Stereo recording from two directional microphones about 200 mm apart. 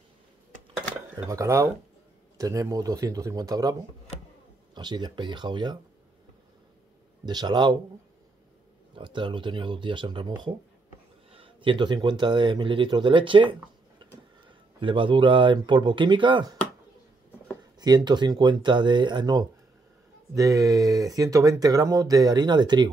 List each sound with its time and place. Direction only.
1.1 s speech: 15° right (ahead or behind)
4.7 s speech: 20° right (ahead or behind)
7.2 s speech: 20° right (ahead or behind)
8.9 s speech: 25° right (ahead or behind)
17.7 s speech: 20° right (ahead or behind)